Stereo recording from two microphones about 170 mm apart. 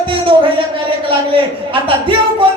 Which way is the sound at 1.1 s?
30° right (ahead or behind).